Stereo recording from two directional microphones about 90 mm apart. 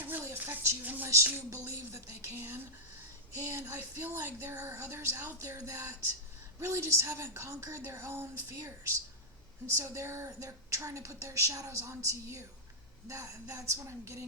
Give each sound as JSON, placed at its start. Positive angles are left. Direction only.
{"t": 0.0, "sound": "a woman's voice", "side_deg": -25}
{"t": 9.7, "sound": "a woman's voice", "side_deg": -30}